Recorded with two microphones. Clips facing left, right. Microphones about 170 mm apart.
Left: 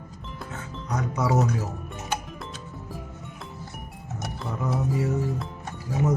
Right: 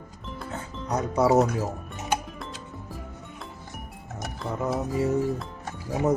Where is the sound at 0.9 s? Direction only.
30° right (ahead or behind).